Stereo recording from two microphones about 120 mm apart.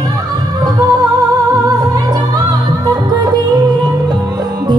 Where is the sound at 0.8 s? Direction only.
30° right (ahead or behind).